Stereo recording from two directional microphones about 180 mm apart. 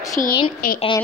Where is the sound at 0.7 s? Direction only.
30° left (ahead or behind).